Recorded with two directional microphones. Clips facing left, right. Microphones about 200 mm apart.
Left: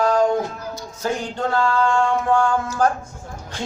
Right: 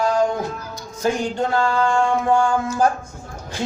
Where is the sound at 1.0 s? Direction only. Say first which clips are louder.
Right 3 dB; 15° right (ahead or behind).